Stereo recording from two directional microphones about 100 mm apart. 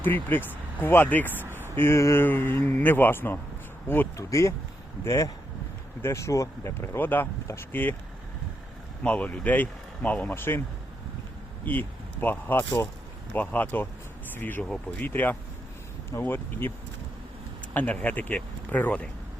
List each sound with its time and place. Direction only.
0.0 s speech: 20° left (ahead or behind)
1.3 s speech: 20° right (ahead or behind)
1.7 s speech: 25° left (ahead or behind)
9.0 s speech: 15° left (ahead or behind)
11.6 s speech: 20° left (ahead or behind)
17.7 s speech: 15° left (ahead or behind)